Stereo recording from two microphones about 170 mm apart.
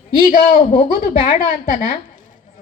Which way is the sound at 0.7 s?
55° left (ahead or behind).